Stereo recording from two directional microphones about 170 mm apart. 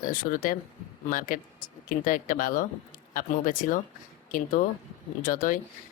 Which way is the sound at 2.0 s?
55° left (ahead or behind).